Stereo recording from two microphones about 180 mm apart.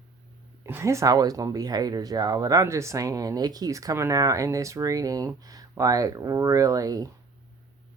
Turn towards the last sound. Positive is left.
turn(degrees=-20)  # may be behind; listen again after turning